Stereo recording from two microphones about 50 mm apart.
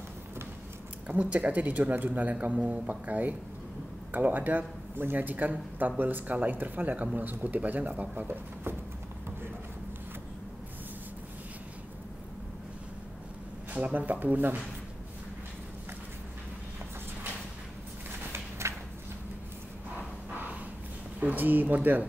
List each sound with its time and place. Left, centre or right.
1.0 s speech: right
13.7 s speech: right
18.3 s a sound: right
21.2 s speech: right